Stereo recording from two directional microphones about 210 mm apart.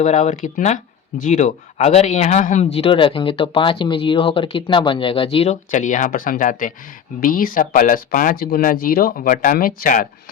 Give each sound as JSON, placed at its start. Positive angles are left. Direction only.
{"t": 0.0, "sound": "speech", "side_deg": 35}